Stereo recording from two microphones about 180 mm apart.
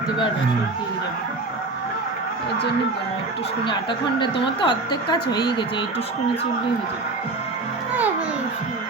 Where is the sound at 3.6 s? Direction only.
25° left (ahead or behind).